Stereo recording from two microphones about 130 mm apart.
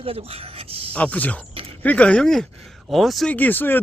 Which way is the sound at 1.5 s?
45° right (ahead or behind).